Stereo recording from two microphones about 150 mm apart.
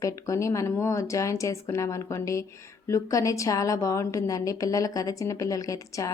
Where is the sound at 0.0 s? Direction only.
20° left (ahead or behind).